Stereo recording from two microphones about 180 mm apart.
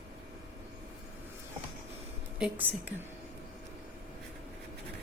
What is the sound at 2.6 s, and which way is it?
Speech, 10° right (ahead or behind).